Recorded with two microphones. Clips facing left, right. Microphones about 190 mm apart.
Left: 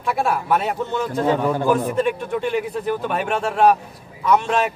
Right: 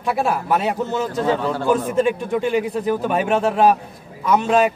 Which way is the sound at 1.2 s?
15° left (ahead or behind).